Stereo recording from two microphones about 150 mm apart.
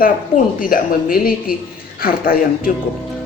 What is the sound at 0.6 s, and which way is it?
Speech, 75° left (ahead or behind).